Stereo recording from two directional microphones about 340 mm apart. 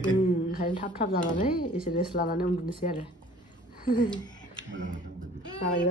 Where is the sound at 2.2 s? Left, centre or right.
Left.